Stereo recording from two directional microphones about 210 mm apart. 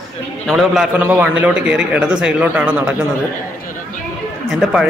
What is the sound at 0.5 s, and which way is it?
A man's voice, centre (ahead or behind).